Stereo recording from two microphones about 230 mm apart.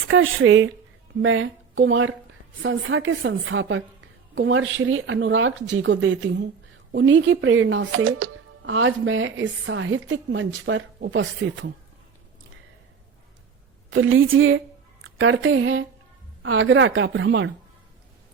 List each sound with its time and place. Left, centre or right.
0.1 s a woman's voice: right
13.9 s speech: right